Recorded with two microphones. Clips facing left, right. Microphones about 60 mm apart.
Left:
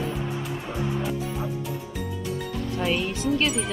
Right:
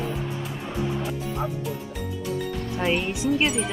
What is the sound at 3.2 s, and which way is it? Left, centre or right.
Speech, centre.